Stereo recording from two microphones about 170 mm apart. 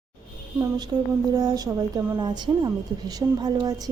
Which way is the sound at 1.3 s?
20° right (ahead or behind).